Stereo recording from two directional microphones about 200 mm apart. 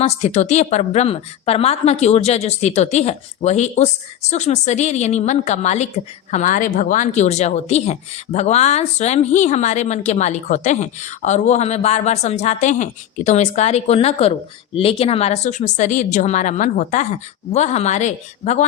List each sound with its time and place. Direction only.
0.0 s speech: 35° left (ahead or behind)